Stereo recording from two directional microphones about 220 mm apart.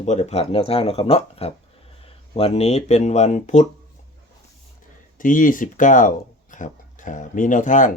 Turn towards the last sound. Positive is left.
turn(degrees=35)  # may be behind; listen again after turning